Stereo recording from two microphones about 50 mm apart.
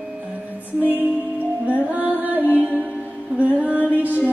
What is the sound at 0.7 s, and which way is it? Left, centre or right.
Music, right.